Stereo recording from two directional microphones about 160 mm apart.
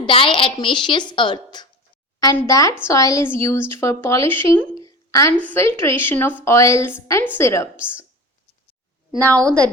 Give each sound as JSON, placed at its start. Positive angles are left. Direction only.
{"t": 0.0, "sound": "a woman's voice", "side_deg": 30}
{"t": 4.8, "sound": "a sound", "side_deg": 20}
{"t": 5.4, "sound": "a woman's voice", "side_deg": 15}
{"t": 9.1, "sound": "a woman's voice", "side_deg": -20}
{"t": 9.4, "sound": "a woman's voice", "side_deg": 5}